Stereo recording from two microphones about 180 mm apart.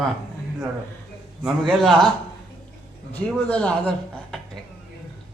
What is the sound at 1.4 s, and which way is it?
Speech, centre (ahead or behind).